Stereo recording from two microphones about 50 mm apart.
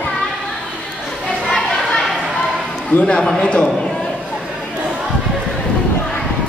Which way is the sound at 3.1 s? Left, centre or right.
Centre.